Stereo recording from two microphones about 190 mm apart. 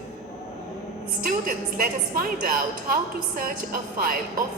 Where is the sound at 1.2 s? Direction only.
45° right (ahead or behind).